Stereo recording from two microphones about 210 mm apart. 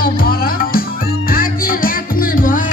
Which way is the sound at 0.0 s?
45° left (ahead or behind).